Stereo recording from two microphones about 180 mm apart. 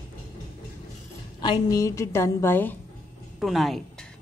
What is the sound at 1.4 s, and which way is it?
A woman's voice, 20° left (ahead or behind).